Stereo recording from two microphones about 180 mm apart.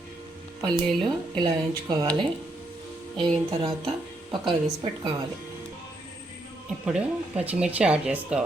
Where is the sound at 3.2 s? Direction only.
25° right (ahead or behind).